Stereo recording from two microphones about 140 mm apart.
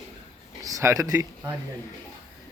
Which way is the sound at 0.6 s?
25° right (ahead or behind).